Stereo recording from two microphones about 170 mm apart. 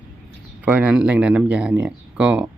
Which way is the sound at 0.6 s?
10° right (ahead or behind).